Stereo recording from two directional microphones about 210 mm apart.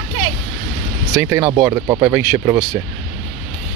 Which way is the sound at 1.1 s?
10° right (ahead or behind).